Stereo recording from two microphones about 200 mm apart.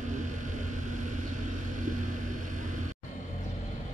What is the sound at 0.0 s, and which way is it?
Vehicle, 40° right (ahead or behind).